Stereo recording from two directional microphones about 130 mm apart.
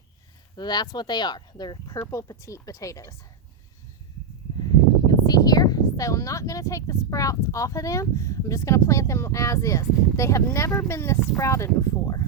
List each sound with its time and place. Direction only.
0.5 s speech: 35° left (ahead or behind)
4.6 s speech: 30° left (ahead or behind)